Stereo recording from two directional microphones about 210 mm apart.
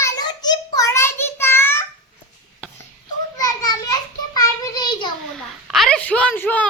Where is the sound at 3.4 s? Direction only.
15° left (ahead or behind).